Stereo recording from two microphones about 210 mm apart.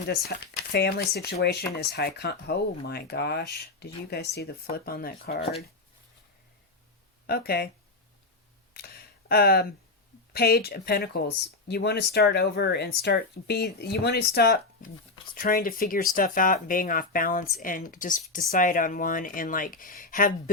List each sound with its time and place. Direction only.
0.1 s speech: 50° left (ahead or behind)
7.3 s speech: 45° left (ahead or behind)
8.7 s speech: 45° left (ahead or behind)